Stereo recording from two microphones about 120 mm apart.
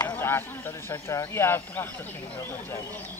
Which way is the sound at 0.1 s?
20° left (ahead or behind).